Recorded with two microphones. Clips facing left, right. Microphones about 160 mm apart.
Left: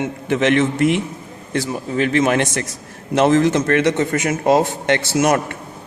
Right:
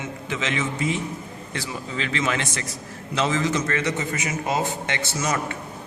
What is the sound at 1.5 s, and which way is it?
A man's voice, 50° left (ahead or behind).